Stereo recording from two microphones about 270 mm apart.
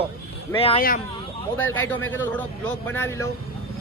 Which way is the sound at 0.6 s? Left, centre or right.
Left.